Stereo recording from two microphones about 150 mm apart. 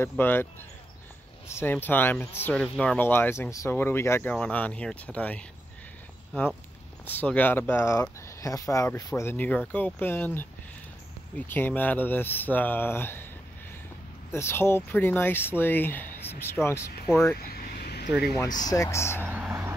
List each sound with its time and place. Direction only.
0.2 s speech: 15° left (ahead or behind)
1.5 s speech: 15° left (ahead or behind)
7.1 s speech: 10° left (ahead or behind)
14.3 s speech: 15° left (ahead or behind)
17.4 s vehicle: 90° left
18.7 s speech: 20° left (ahead or behind)
19.2 s vehicle: 10° right (ahead or behind)